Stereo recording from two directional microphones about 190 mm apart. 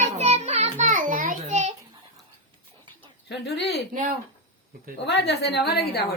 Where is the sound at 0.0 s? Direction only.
35° right (ahead or behind).